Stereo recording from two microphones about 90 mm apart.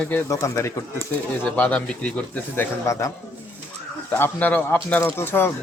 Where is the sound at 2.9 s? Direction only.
35° left (ahead or behind).